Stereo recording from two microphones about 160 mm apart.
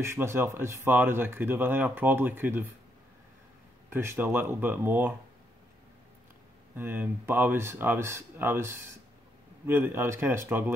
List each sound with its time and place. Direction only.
0.0 s speech: 15° right (ahead or behind)
3.9 s speech: 15° right (ahead or behind)
6.7 s speech: 10° right (ahead or behind)